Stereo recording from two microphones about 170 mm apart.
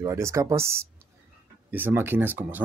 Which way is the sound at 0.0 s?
15° right (ahead or behind).